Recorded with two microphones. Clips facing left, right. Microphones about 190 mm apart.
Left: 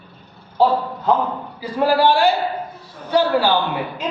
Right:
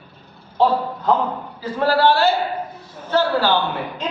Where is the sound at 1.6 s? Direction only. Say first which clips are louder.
Left 1 dB; 15° left (ahead or behind).